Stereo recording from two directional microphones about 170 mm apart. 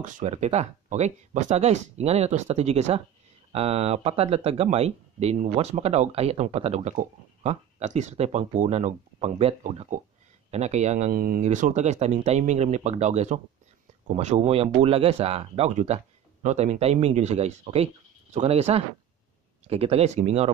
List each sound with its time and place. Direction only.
0.0 s a man's voice: 45° right (ahead or behind)
11.1 s speech: 60° right (ahead or behind)
11.4 s speech: 45° right (ahead or behind)